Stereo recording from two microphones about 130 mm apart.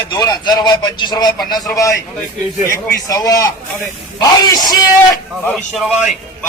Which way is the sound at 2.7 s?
20° left (ahead or behind).